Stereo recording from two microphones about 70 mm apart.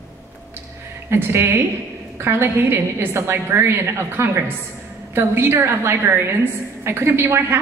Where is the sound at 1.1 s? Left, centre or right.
Right.